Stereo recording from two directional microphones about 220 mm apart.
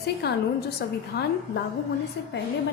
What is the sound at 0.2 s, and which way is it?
A woman's voice, 50° left (ahead or behind).